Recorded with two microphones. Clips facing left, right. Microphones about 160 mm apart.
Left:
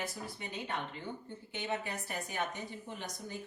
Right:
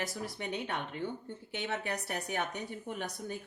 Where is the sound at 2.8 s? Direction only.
55° right (ahead or behind).